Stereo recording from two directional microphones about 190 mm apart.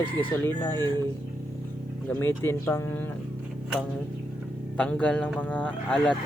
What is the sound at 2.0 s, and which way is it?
Speech, 10° left (ahead or behind).